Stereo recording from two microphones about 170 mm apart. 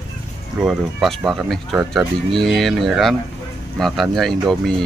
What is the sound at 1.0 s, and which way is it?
Speech, 5° right (ahead or behind).